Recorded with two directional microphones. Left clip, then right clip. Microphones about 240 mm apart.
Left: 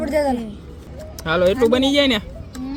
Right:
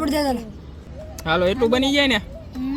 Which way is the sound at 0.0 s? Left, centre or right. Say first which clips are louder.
Left 2 dB; right.